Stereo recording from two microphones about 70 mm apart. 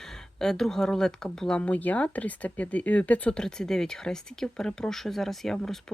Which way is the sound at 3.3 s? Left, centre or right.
Centre.